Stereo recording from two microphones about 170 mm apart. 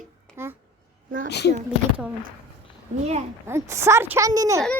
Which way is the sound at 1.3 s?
80° left.